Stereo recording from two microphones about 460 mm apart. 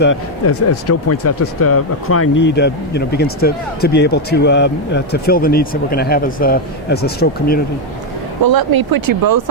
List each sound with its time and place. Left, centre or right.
0.0 s speech: left
8.4 s speech: right